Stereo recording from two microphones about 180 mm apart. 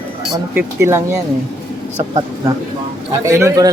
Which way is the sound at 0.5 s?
15° right (ahead or behind).